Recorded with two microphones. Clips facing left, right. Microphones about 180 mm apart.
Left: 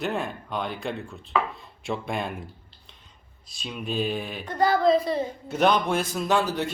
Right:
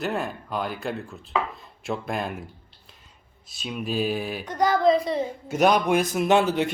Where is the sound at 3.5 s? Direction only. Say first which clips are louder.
Right 2 dB; centre (ahead or behind); by 5.2 s 20° right (ahead or behind).